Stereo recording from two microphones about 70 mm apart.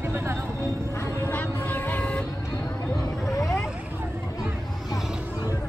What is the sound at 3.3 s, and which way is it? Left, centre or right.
Vehicle, left.